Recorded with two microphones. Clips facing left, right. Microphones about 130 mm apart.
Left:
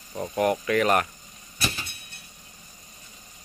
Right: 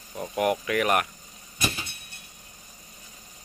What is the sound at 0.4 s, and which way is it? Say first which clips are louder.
Speech: left 2 dB; 10° right (ahead or behind).